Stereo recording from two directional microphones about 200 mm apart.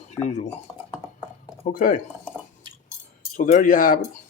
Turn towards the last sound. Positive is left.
turn(degrees=45)  # may be behind; listen again after turning